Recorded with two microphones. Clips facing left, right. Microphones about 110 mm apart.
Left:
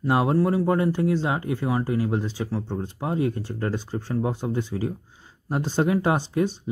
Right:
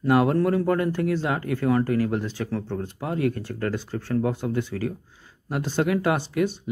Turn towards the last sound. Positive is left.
turn(degrees=25)  # may be behind; listen again after turning